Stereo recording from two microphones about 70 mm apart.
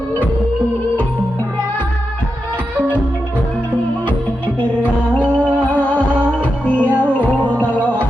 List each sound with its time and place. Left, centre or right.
4.8 s music: left